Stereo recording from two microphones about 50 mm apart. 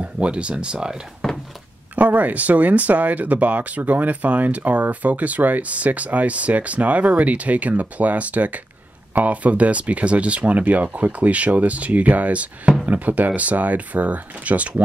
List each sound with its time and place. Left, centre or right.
0.0 s speech: right
1.2 s a sound: centre
2.0 s speech: right